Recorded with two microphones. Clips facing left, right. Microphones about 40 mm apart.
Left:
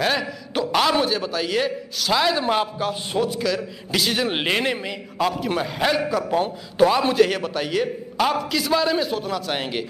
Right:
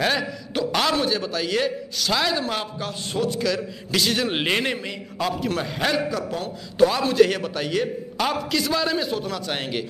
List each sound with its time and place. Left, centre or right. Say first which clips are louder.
0.0 s a man's voice: left 1 dB; centre
7.2 s a man's voice: right 1 dB; centre